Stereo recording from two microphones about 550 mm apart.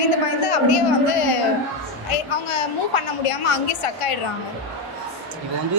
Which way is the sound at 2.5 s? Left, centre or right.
Left.